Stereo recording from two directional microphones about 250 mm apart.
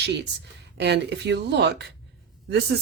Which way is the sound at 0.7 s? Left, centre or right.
Right.